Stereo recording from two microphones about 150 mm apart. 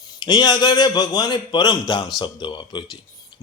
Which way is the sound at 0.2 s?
30° left (ahead or behind).